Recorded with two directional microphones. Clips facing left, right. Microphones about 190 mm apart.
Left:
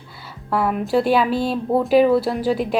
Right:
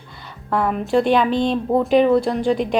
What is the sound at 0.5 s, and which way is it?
Speech, 5° left (ahead or behind).